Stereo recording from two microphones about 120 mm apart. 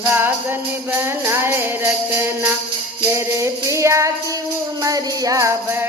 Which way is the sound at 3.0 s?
25° right (ahead or behind).